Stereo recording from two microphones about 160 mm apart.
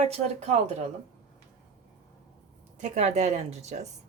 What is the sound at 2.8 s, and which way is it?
A woman's voice, 45° right (ahead or behind).